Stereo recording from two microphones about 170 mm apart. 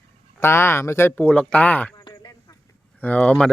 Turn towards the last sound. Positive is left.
turn(degrees=5)  # may be behind; listen again after turning